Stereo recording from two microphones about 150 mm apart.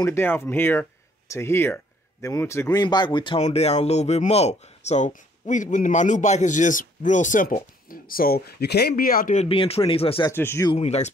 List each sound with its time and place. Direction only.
0.0 s speech: 15° left (ahead or behind); by 3.3 s 30° left (ahead or behind)
3.3 s speech: 45° left (ahead or behind); by 9.4 s 75° left (ahead or behind)
9.4 s speech: 40° left (ahead or behind)
10.3 s speech: 15° left (ahead or behind)
10.7 s speech: 45° left (ahead or behind)